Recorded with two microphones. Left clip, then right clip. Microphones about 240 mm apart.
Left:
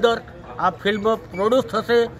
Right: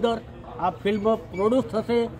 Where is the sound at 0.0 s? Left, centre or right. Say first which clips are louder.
Left 6 dB; centre.